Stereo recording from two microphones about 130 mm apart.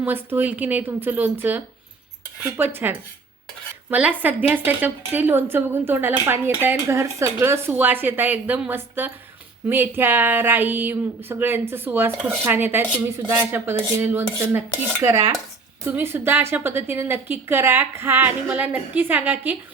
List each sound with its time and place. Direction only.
0.0 s a woman's voice: 15° right (ahead or behind)
15.0 s dishes: 25° right (ahead or behind)
15.8 s a woman's voice: 15° right (ahead or behind)